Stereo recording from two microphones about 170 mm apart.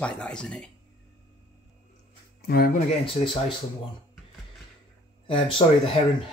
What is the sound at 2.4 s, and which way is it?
Speech, 65° left (ahead or behind).